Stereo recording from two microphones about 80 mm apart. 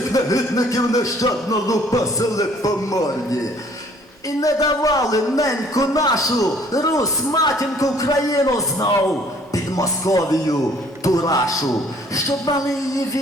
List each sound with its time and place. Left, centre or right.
0.1 s a man's voice: left
4.4 s a man's voice: left